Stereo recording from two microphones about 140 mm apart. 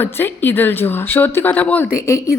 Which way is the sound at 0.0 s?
15° left (ahead or behind).